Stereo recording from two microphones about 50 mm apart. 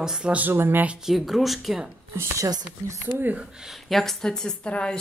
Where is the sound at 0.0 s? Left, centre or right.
Centre.